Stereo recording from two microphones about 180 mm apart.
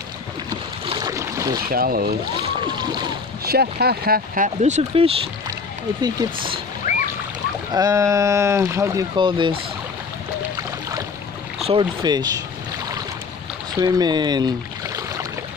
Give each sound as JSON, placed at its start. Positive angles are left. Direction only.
{"t": 0.8, "sound": "boat", "side_deg": -25}
{"t": 1.7, "sound": "speech", "side_deg": -55}
{"t": 2.4, "sound": "boat", "side_deg": -25}
{"t": 3.4, "sound": "speech", "side_deg": -60}
{"t": 4.6, "sound": "speech", "side_deg": -40}
{"t": 6.8, "sound": "boat", "side_deg": 45}
{"t": 7.7, "sound": "speech", "side_deg": -20}
{"t": 11.6, "sound": "speech", "side_deg": -25}
{"t": 13.7, "sound": "speech", "side_deg": -20}